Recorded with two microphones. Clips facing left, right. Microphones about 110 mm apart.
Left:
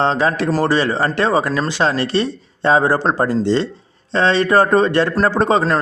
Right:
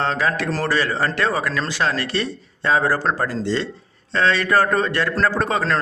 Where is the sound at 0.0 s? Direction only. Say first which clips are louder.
Left 5 dB; 25° left (ahead or behind).